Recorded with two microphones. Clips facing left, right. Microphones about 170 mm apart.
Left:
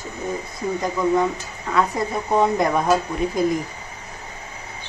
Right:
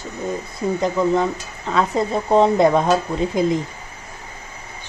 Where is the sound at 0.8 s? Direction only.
25° right (ahead or behind).